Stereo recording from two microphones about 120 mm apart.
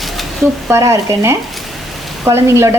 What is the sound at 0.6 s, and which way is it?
A woman's voice, 25° right (ahead or behind).